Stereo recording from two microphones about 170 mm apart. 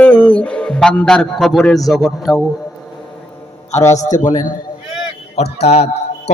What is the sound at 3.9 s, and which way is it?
Speech, 45° left (ahead or behind).